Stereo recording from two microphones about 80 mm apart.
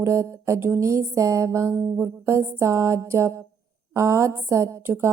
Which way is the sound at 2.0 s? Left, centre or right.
Right.